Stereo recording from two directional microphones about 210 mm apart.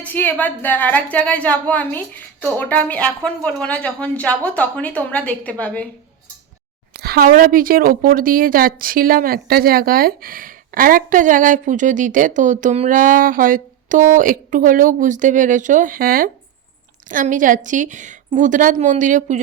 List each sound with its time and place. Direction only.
0.0 s a woman's voice: 10° left (ahead or behind)
6.9 s a woman's voice: 50° right (ahead or behind)